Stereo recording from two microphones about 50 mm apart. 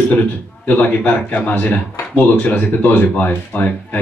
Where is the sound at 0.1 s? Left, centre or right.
Left.